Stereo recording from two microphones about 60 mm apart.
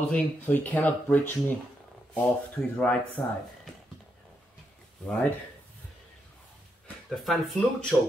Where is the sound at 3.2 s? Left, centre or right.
Left.